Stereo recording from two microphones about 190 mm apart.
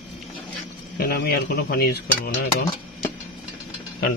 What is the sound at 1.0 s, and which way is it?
Cutlery, 55° left (ahead or behind).